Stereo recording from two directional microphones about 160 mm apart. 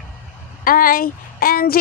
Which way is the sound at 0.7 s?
65° left (ahead or behind).